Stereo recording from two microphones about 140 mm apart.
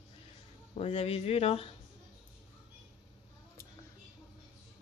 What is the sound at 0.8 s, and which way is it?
Speech, 45° left (ahead or behind).